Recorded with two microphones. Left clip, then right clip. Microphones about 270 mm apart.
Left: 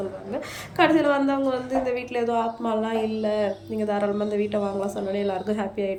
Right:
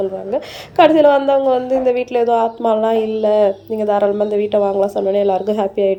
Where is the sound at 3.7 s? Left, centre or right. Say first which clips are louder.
Right 9 dB; right.